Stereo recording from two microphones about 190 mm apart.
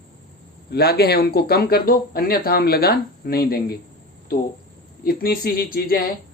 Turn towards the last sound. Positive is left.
turn(degrees=50)  # may be behind; listen again after turning